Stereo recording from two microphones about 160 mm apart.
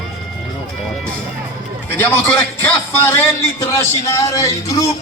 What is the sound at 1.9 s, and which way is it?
A man's voice, 15° left (ahead or behind).